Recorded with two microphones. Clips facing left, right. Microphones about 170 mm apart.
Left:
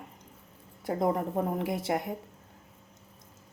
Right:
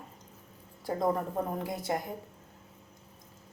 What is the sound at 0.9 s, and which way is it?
A woman's voice, 20° left (ahead or behind).